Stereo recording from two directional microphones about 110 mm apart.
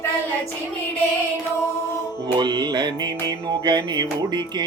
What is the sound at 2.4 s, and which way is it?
Music, 40° right (ahead or behind).